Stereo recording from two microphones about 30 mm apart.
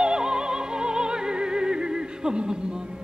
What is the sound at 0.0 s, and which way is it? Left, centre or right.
Music, right.